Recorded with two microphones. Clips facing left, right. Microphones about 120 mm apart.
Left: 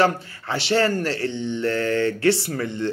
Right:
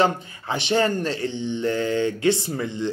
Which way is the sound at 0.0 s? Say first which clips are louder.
Left 1 dB; 20° right (ahead or behind).